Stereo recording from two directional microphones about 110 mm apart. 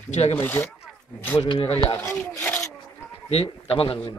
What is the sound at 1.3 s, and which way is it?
Speech, 55° left (ahead or behind).